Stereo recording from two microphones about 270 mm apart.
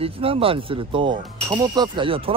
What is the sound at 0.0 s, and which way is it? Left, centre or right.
Speech, right.